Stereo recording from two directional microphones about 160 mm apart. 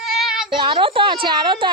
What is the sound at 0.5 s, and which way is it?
A woman's voice, 30° right (ahead or behind).